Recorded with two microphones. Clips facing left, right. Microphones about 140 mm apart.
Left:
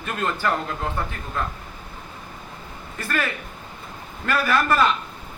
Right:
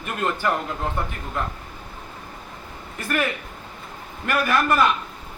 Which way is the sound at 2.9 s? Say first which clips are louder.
Right 1 dB; 20° right (ahead or behind).